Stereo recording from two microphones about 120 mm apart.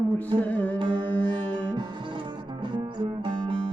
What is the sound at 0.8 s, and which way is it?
Carnatic music, 40° right (ahead or behind).